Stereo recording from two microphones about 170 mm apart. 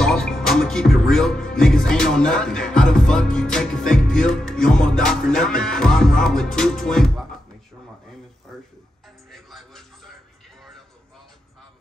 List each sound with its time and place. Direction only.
0.0 s music: 5° left (ahead or behind)
9.3 s music: centre (ahead or behind)